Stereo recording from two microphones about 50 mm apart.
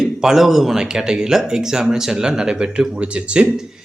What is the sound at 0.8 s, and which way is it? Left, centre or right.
Speech, centre.